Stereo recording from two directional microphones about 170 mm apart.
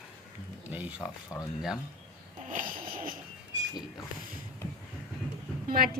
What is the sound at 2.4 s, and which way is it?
Wheeze, 50° right (ahead or behind).